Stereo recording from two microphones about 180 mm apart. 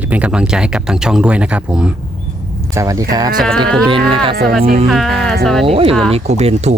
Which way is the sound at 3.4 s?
5° left (ahead or behind).